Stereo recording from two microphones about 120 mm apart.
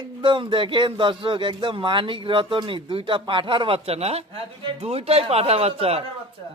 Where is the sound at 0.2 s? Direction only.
45° right (ahead or behind).